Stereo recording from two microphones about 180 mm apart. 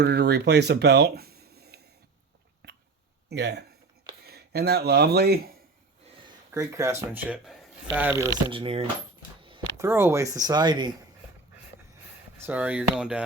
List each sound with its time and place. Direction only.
0.0 s speech: 65° right (ahead or behind)
2.6 s a sound: 60° right (ahead or behind)
3.2 s speech: 70° right (ahead or behind)
6.5 s speech: 15° right (ahead or behind)
8.4 s speech: 30° right (ahead or behind)
9.4 s a sound: 30° right (ahead or behind)
9.7 s speech: 15° right (ahead or behind)
12.4 s speech: 10° right (ahead or behind)